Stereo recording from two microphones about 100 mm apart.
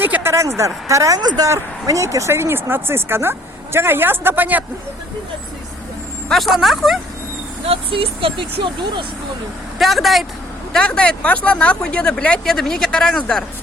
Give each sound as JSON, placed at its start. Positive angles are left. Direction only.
{"t": 0.0, "sound": "speech", "side_deg": -20}
{"t": 1.2, "sound": "a woman's voice", "side_deg": -45}
{"t": 1.5, "sound": "speech", "side_deg": -30}
{"t": 6.2, "sound": "speech", "side_deg": 0}
{"t": 7.6, "sound": "speech", "side_deg": -70}
{"t": 9.7, "sound": "speech", "side_deg": 0}